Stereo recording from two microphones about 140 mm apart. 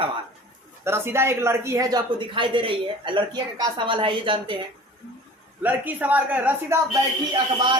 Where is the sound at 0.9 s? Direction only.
15° right (ahead or behind); by 4.5 s 35° right (ahead or behind).